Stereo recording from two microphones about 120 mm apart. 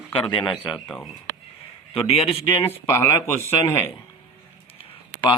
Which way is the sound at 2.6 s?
20° left (ahead or behind).